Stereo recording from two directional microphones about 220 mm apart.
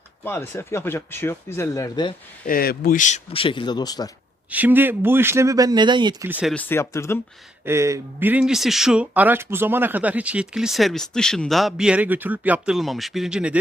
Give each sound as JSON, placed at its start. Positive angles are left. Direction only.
{"t": 0.3, "sound": "speech", "side_deg": 10}
{"t": 2.5, "sound": "speech", "side_deg": 45}
{"t": 4.5, "sound": "speech", "side_deg": -10}
{"t": 6.5, "sound": "speech", "side_deg": 10}
{"t": 7.6, "sound": "speech", "side_deg": -10}